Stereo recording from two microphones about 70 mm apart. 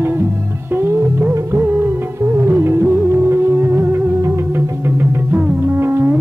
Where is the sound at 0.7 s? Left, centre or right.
Right.